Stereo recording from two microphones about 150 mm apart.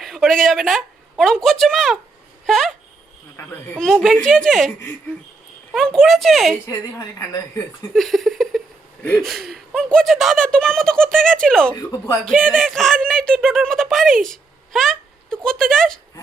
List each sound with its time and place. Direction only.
0.0 s a woman's voice: centre (ahead or behind)
3.3 s speech: 10° left (ahead or behind)
3.8 s speech: centre (ahead or behind)
5.7 s speech: 5° left (ahead or behind)
7.9 s a sound: centre (ahead or behind)
9.2 s speech: centre (ahead or behind)
11.7 s speech: 20° left (ahead or behind)
12.2 s speech: 5° left (ahead or behind)